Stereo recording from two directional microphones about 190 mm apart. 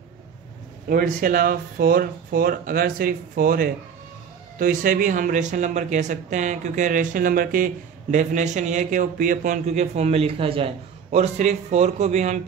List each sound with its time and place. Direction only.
0.8 s speech: 50° right (ahead or behind)